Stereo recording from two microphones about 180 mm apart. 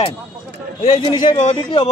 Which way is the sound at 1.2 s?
45° left (ahead or behind).